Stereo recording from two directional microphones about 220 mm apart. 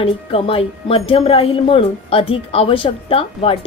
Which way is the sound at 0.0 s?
25° left (ahead or behind).